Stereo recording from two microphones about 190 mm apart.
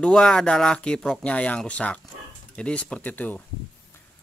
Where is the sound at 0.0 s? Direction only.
5° left (ahead or behind).